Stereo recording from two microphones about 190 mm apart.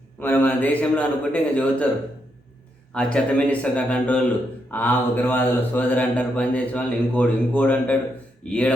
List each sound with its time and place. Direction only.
0.2 s a man's voice: 10° left (ahead or behind)
2.9 s a man's voice: 5° left (ahead or behind)